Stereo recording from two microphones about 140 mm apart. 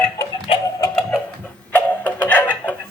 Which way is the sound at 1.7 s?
15° left (ahead or behind).